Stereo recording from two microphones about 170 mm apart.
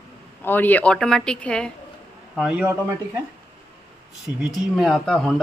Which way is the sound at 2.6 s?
15° right (ahead or behind).